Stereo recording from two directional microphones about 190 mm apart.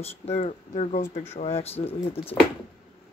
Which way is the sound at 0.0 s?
35° left (ahead or behind).